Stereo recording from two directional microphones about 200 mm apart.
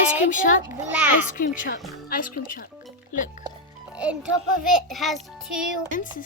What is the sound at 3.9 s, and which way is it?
Music, 5° right (ahead or behind).